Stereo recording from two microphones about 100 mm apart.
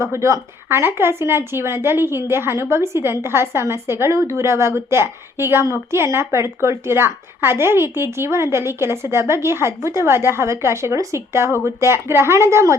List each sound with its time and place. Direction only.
0.0 s a woman's voice: 30° right (ahead or behind)